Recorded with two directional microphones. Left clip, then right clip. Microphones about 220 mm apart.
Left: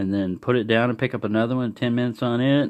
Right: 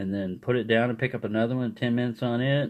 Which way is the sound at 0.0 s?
40° left (ahead or behind).